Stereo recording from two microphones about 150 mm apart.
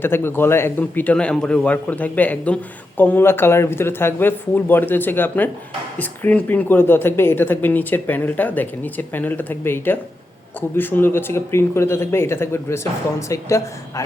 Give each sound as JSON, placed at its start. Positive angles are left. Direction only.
{"t": 0.0, "sound": "speech", "side_deg": 15}